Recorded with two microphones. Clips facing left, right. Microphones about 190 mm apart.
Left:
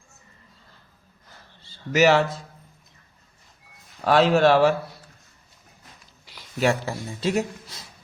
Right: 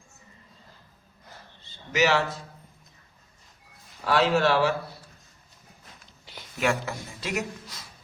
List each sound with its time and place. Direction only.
1.9 s a man's voice: 45° left (ahead or behind)
4.0 s a man's voice: 50° left (ahead or behind)
6.6 s speech: 30° left (ahead or behind)